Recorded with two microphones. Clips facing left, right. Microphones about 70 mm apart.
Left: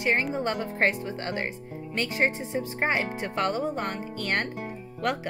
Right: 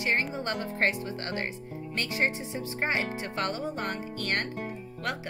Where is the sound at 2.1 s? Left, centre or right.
Left.